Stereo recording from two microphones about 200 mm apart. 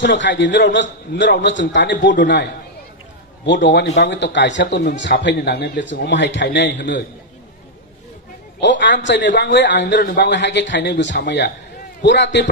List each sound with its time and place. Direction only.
0.0 s a man's voice: 60° left (ahead or behind)
3.4 s a man's voice: 60° left (ahead or behind)
8.5 s a man's voice: 60° left (ahead or behind)